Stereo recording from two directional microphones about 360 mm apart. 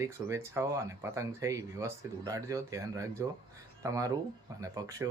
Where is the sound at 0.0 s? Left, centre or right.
Centre.